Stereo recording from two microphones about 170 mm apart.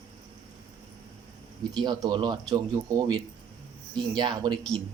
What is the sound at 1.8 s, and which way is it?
Speech, 25° right (ahead or behind).